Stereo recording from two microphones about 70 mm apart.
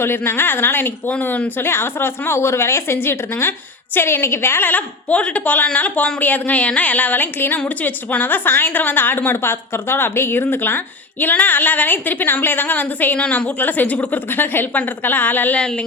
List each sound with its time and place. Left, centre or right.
0.0 s a woman's voice: left